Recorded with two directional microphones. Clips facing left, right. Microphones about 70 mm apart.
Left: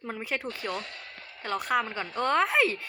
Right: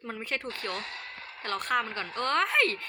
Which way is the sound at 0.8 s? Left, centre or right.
Right.